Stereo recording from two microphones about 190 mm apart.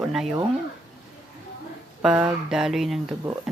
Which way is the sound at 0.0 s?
Centre (ahead or behind).